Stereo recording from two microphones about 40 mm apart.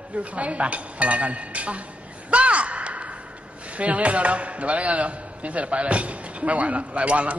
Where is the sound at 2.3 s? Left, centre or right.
Right.